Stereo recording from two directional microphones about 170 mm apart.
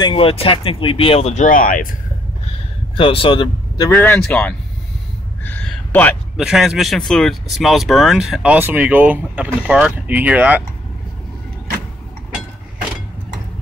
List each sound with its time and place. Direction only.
0.0 s speech: 30° left (ahead or behind); by 1.9 s 55° left (ahead or behind)
3.0 s speech: 30° left (ahead or behind)
4.0 s speech: 5° left (ahead or behind)
5.4 s a sound: 10° left (ahead or behind)
6.4 s speech: centre (ahead or behind)